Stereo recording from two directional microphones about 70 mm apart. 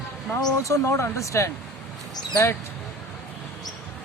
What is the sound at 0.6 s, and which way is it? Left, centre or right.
Speech, left.